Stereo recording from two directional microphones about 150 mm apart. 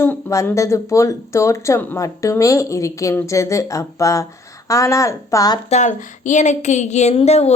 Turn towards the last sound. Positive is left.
turn(degrees=45)  # may be behind; listen again after turning